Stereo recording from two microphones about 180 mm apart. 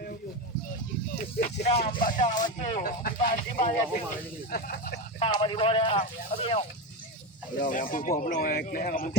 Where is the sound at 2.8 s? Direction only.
55° left (ahead or behind).